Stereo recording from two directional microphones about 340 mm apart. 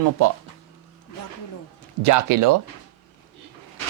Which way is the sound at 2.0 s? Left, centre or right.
Right.